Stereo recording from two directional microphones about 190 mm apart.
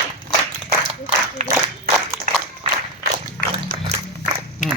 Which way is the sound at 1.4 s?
35° right (ahead or behind).